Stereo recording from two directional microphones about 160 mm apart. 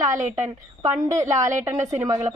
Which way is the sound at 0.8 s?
20° right (ahead or behind).